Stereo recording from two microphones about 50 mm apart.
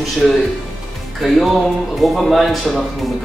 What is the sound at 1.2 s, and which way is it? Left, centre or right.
Speech, centre.